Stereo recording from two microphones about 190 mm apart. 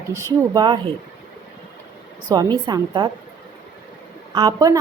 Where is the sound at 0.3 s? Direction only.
20° right (ahead or behind).